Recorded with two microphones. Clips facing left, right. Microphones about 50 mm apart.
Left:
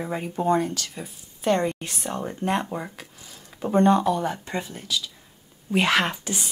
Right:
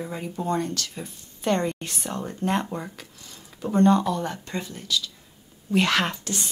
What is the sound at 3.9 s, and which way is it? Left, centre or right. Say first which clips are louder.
Speech: left 2 dB; centre.